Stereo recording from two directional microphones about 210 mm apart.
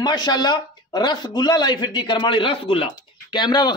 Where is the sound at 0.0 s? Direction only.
20° left (ahead or behind).